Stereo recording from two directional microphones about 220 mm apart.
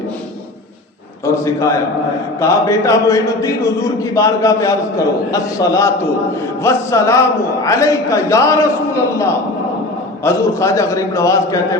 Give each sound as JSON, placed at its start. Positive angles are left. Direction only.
{"t": 2.4, "sound": "a man's voice", "side_deg": 15}